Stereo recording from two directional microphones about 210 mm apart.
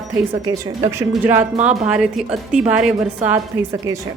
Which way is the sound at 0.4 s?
15° right (ahead or behind).